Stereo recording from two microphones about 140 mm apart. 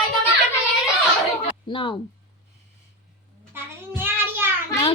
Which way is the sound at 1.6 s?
35° left (ahead or behind).